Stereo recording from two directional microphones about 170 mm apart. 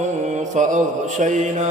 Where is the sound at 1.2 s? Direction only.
45° right (ahead or behind).